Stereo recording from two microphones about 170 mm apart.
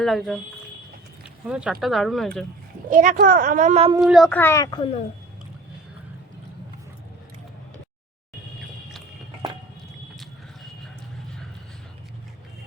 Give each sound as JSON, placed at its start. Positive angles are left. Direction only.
{"t": 0.0, "sound": "speech", "side_deg": 0}
{"t": 1.5, "sound": "speech", "side_deg": -5}
{"t": 2.9, "sound": "speech", "side_deg": -50}
{"t": 4.0, "sound": "speech", "side_deg": 0}
{"t": 4.3, "sound": "a child's voice", "side_deg": 15}